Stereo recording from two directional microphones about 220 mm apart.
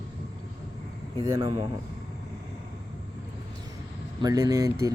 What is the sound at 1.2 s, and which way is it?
Speech, 20° right (ahead or behind).